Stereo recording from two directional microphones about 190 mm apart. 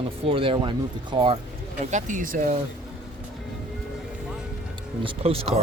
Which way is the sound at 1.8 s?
40° right (ahead or behind).